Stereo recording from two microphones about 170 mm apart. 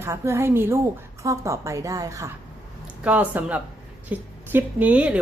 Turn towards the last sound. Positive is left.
turn(degrees=-10)  # may be behind; listen again after turning